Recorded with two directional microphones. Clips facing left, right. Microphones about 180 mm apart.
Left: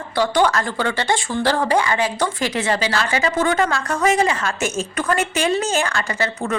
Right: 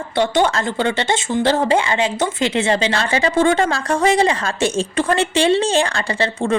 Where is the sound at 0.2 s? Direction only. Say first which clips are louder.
Right 1 dB; 25° right (ahead or behind).